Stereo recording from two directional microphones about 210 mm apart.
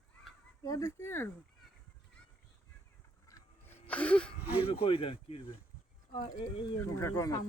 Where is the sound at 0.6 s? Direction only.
15° left (ahead or behind).